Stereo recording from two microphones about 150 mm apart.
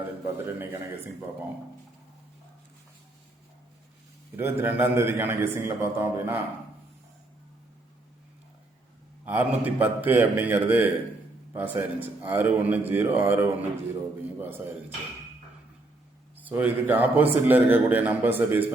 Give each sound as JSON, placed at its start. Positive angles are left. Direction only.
{"t": 0.3, "sound": "a man's voice", "side_deg": -15}
{"t": 4.4, "sound": "a man's voice", "side_deg": -15}
{"t": 9.2, "sound": "a man's voice", "side_deg": -10}
{"t": 16.5, "sound": "a man's voice", "side_deg": -10}